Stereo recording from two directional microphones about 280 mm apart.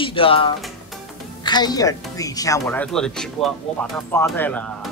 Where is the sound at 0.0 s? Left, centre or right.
Centre.